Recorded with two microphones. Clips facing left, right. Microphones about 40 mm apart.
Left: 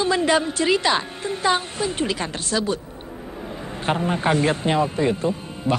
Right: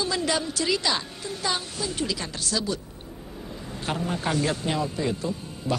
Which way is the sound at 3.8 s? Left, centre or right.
Left.